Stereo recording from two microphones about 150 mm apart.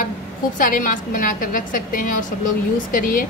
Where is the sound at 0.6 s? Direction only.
65° left (ahead or behind).